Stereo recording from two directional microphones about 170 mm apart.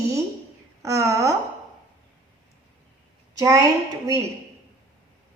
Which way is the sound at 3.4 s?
20° right (ahead or behind).